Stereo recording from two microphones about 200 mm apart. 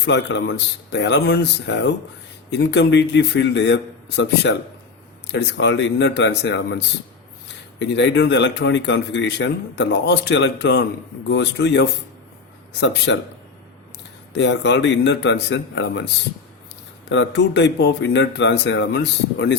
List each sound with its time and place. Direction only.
0.0 s speech: 60° left (ahead or behind)
14.3 s speech: 60° left (ahead or behind)
17.1 s speech: 60° left (ahead or behind)